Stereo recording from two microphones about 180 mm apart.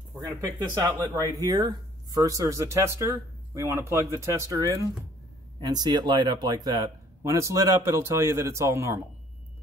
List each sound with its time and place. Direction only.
0.2 s speech: 15° right (ahead or behind)